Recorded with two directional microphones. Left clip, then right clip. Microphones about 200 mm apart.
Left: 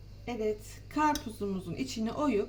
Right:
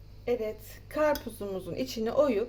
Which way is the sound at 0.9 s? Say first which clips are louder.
Right 2 dB; 55° right (ahead or behind).